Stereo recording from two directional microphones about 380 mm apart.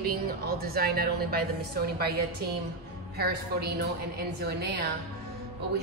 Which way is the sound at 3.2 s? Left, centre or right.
Right.